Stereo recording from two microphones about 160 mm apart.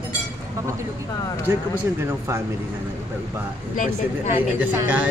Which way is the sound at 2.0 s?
15° right (ahead or behind).